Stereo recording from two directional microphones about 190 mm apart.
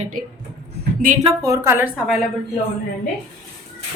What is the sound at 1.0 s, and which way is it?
Speech, 45° right (ahead or behind).